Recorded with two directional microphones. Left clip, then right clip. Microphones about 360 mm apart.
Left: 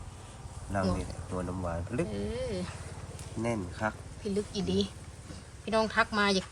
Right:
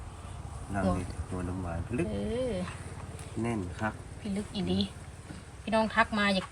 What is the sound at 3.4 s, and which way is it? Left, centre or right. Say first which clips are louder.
Speech: left 1 dB; centre.